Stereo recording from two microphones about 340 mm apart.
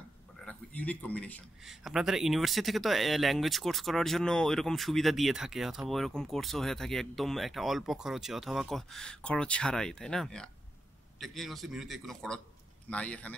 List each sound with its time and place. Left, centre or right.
0.5 s a man's voice: centre